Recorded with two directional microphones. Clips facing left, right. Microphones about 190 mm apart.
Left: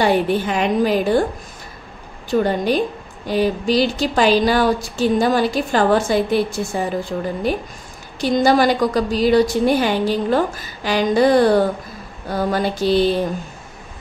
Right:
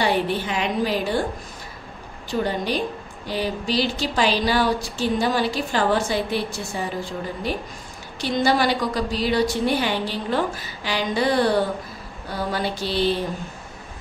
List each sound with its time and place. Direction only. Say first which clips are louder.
0.0 s speech: left 5 dB; 50° left (ahead or behind)
2.4 s speech: left 4 dB; 50° left (ahead or behind)
8.2 s speech: left 5 dB; 45° left (ahead or behind)